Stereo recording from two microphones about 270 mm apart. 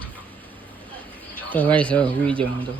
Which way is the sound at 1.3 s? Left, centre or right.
Centre.